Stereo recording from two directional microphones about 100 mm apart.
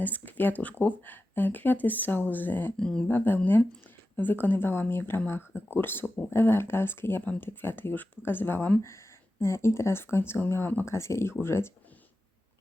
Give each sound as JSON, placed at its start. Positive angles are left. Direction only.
{"t": 0.0, "sound": "speech", "side_deg": 15}